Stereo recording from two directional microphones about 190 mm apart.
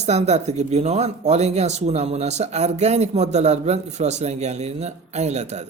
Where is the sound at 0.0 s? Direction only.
35° right (ahead or behind).